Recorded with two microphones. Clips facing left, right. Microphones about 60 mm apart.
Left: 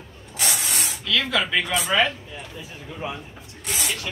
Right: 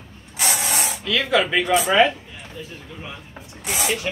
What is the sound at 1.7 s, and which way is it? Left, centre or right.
Speech, centre.